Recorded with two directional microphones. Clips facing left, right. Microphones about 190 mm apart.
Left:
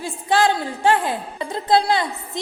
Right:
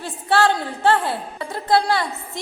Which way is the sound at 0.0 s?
15° left (ahead or behind).